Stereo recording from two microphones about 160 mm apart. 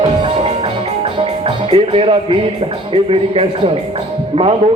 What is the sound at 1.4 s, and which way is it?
Music, 30° right (ahead or behind).